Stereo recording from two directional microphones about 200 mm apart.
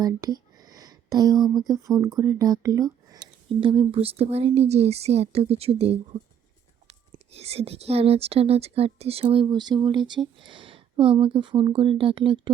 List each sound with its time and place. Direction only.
0.0 s a sound: 20° right (ahead or behind)
1.5 s a woman's voice: 20° right (ahead or behind)
7.3 s speech: 30° right (ahead or behind)